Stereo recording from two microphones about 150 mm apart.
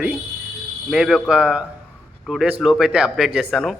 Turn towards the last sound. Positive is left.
turn(degrees=-5)  # may be behind; listen again after turning